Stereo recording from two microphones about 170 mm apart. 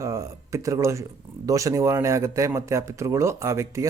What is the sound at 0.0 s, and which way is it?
Speech, 20° right (ahead or behind).